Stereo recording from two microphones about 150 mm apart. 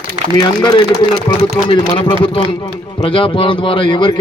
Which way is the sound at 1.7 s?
35° left (ahead or behind).